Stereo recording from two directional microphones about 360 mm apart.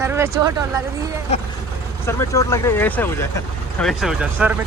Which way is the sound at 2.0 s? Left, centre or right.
Centre.